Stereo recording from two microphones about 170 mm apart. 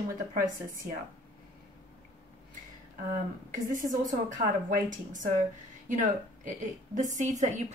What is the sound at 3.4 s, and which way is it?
A woman's voice, 50° right (ahead or behind).